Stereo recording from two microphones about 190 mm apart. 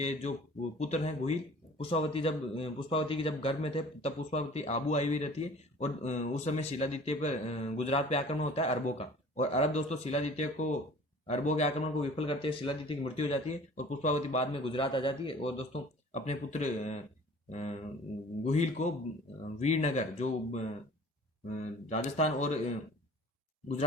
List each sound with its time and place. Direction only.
0.0 s speech: 35° left (ahead or behind)